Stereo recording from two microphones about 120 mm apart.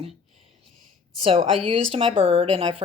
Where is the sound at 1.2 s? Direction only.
50° right (ahead or behind).